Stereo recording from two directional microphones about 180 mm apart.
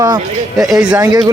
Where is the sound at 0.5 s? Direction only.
Centre (ahead or behind).